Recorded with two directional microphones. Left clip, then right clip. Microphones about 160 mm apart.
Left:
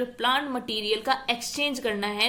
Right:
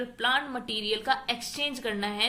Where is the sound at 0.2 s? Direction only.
30° left (ahead or behind).